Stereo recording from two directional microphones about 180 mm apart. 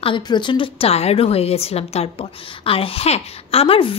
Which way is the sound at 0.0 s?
25° left (ahead or behind).